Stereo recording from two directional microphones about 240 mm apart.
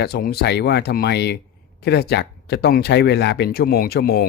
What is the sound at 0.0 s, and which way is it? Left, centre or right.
Speech, left.